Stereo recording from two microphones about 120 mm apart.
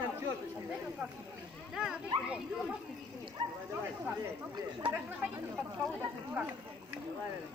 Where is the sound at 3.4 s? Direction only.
40° right (ahead or behind).